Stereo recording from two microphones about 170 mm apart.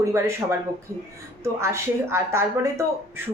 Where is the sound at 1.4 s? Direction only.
15° right (ahead or behind).